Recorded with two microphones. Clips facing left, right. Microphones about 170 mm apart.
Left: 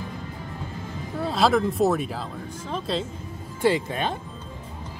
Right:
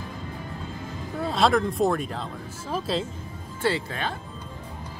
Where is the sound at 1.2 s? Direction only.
Centre (ahead or behind).